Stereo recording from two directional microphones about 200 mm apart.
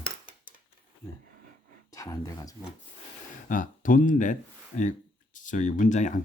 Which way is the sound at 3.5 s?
40° left (ahead or behind).